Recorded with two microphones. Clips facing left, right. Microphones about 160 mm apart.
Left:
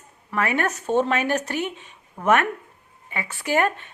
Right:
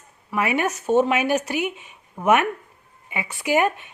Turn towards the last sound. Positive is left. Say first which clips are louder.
# right 2 dB
turn(degrees=-10)  # may be behind; listen again after turning